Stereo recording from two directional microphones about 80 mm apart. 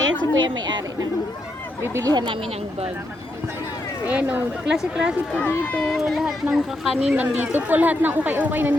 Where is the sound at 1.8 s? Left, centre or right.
Right.